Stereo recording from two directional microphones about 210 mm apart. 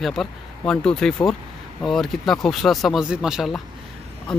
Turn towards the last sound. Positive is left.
turn(degrees=-5)  # may be behind; listen again after turning